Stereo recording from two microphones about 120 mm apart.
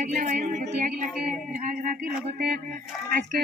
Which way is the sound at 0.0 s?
90° right.